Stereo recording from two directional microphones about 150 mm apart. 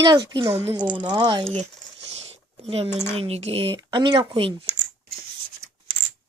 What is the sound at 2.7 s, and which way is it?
Speech, 40° right (ahead or behind).